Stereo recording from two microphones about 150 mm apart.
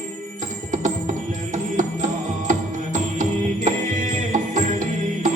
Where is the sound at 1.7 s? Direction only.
55° right (ahead or behind).